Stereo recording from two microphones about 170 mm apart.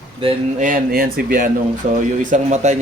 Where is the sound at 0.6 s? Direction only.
55° right (ahead or behind).